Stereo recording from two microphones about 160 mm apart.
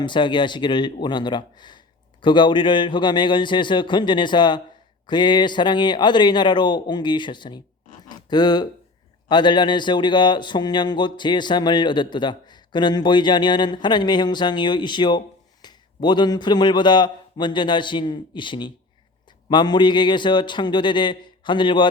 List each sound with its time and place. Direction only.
0.0 s speech: 30° left (ahead or behind)